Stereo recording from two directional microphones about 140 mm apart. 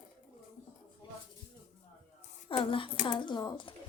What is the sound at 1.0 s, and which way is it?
Music, 35° left (ahead or behind).